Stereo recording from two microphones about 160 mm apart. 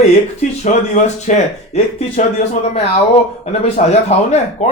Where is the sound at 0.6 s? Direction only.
45° left (ahead or behind).